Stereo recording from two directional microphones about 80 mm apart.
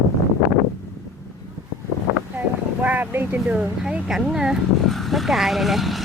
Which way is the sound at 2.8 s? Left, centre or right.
Right.